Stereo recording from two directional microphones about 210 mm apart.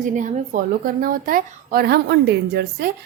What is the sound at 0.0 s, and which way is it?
Speech, 35° right (ahead or behind).